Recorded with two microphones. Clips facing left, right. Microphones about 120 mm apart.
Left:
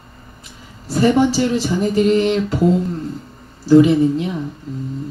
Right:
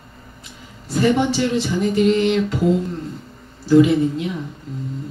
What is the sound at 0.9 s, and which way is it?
Speech, 35° left (ahead or behind).